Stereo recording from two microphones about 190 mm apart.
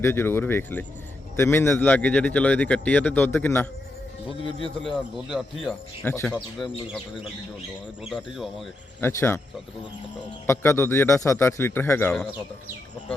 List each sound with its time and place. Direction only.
0.0 s speech: 10° left (ahead or behind)
4.3 s speech: 25° left (ahead or behind)
4.8 s speech: centre (ahead or behind)
6.1 s speech: 10° left (ahead or behind)
6.3 s speech: centre (ahead or behind)
8.0 s speech: centre (ahead or behind)
9.0 s speech: 10° left (ahead or behind)
10.4 s speech: 15° left (ahead or behind)